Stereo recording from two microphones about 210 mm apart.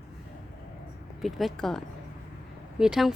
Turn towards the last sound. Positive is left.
turn(degrees=0)  # may be behind; listen again after turning